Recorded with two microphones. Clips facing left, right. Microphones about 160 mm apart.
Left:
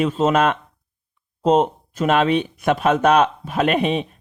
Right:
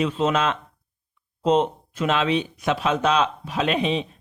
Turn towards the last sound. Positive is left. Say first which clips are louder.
# left 4 dB
turn(degrees=55)  # may be behind; listen again after turning